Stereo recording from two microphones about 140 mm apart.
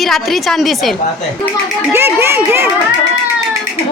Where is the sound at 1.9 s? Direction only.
15° right (ahead or behind).